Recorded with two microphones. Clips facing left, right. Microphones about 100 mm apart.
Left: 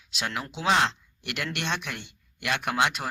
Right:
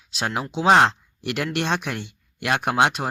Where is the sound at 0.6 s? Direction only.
50° right (ahead or behind).